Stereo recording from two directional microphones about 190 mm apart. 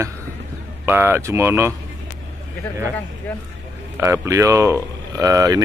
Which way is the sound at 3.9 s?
15° right (ahead or behind).